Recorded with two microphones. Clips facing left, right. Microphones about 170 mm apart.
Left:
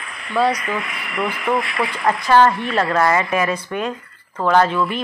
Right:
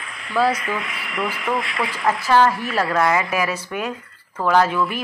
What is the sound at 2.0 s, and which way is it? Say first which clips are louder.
A woman's voice: left 2 dB; 5° right (ahead or behind).